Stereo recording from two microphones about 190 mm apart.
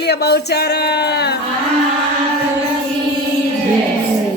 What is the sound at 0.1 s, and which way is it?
Speech, 60° left (ahead or behind).